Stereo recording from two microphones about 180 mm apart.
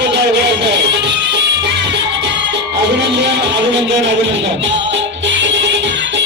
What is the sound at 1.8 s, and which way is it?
Music, 75° right (ahead or behind).